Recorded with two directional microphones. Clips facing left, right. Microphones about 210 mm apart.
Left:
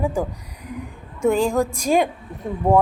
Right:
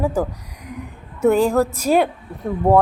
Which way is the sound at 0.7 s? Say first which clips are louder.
Left 1 dB; 10° right (ahead or behind).